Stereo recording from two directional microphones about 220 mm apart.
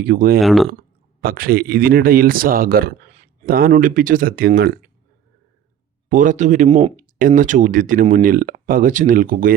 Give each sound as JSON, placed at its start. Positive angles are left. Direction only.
{"t": 0.0, "sound": "speech", "side_deg": -40}
{"t": 0.4, "sound": "speech", "side_deg": 0}
{"t": 1.2, "sound": "speech", "side_deg": -45}
{"t": 6.1, "sound": "speech", "side_deg": -35}